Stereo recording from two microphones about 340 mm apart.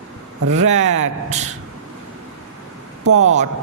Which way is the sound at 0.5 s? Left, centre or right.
Centre.